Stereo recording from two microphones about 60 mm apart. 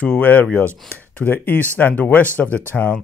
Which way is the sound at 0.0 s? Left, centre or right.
Left.